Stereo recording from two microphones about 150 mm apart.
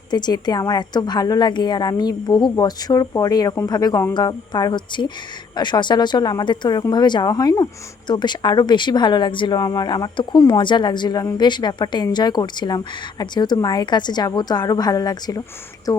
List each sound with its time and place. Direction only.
0.1 s speech: 30° left (ahead or behind)